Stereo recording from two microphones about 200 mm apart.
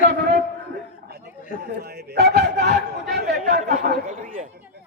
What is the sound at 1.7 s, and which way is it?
A man's voice, 55° right (ahead or behind).